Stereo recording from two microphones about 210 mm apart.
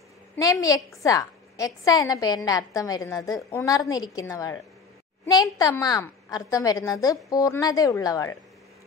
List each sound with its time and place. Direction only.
0.4 s a woman's voice: 15° left (ahead or behind)